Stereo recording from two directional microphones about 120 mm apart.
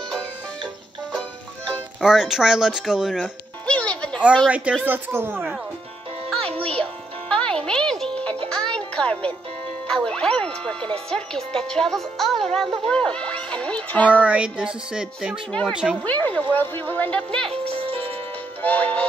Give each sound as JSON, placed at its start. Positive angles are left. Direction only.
{"t": 2.0, "sound": "speech", "side_deg": -5}
{"t": 3.6, "sound": "music", "side_deg": 10}
{"t": 4.5, "sound": "music", "side_deg": -10}
{"t": 7.2, "sound": "music", "side_deg": 10}
{"t": 9.8, "sound": "speech", "side_deg": 5}
{"t": 14.2, "sound": "music", "side_deg": -10}
{"t": 16.0, "sound": "speech", "side_deg": 15}
{"t": 17.5, "sound": "music", "side_deg": -50}
{"t": 18.6, "sound": "music", "side_deg": 15}